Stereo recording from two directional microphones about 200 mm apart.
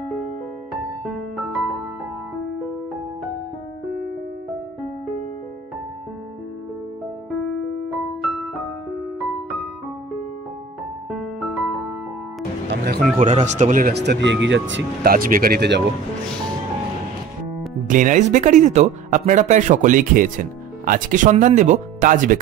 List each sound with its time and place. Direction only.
1.0 s music: centre (ahead or behind)
8.2 s music: centre (ahead or behind)
11.1 s music: centre (ahead or behind)
12.6 s music: 50° right (ahead or behind)
13.2 s speech: 35° right (ahead or behind); by 14.8 s 65° right (ahead or behind)
15.0 s speech: 45° right (ahead or behind)
17.8 s speech: 40° right (ahead or behind)